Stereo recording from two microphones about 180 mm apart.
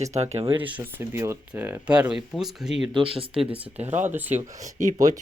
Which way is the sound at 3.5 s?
10° right (ahead or behind).